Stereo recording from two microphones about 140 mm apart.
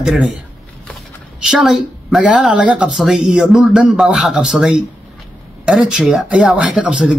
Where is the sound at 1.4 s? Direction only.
5° right (ahead or behind).